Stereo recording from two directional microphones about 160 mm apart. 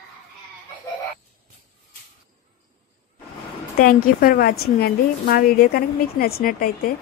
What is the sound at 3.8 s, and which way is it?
A woman's voice, 65° left (ahead or behind).